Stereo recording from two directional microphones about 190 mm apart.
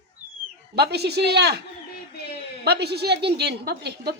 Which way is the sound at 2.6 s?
60° right (ahead or behind).